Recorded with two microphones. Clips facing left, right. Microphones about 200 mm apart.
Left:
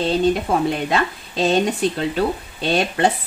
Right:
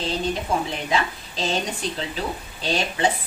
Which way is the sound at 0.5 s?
60° left (ahead or behind).